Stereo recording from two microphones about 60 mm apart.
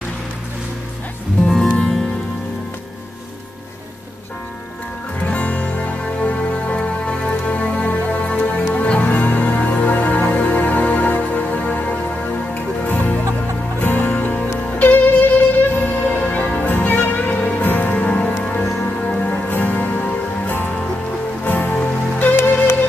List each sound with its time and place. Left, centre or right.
5.2 s music: centre